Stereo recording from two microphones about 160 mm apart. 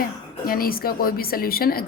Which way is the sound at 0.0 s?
65° left (ahead or behind).